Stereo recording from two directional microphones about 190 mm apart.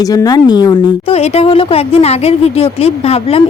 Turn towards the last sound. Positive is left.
turn(degrees=30)  # may be behind; listen again after turning